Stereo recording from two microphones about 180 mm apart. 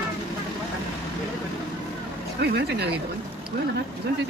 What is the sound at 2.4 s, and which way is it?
Speech, 65° right (ahead or behind).